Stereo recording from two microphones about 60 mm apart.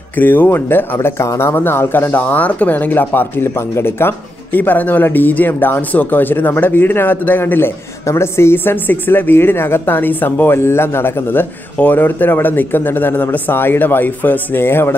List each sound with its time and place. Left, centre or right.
0.1 s speech: left
0.9 s speech: left
1.5 s speech: left
8.0 s speech: left